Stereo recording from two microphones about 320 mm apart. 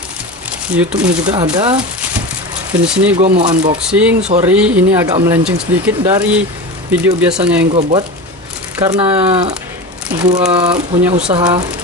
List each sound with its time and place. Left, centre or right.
0.7 s speech: centre
2.9 s speech: centre
3.2 s speech: right
3.8 s speech: centre
8.7 s speech: centre